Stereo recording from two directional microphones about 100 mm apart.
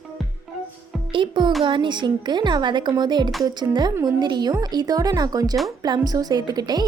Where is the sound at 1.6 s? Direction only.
55° right (ahead or behind).